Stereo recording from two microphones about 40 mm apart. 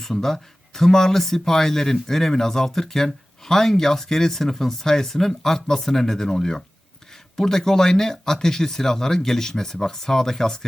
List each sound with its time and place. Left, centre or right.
0.0 s speech: centre